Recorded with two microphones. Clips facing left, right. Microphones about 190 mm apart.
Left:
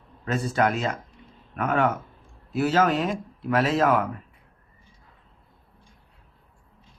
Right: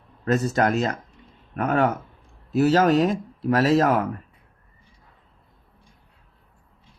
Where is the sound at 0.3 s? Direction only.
40° right (ahead or behind).